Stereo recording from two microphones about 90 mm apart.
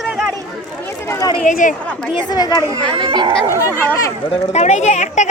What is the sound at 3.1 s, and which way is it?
Speech, 70° right (ahead or behind).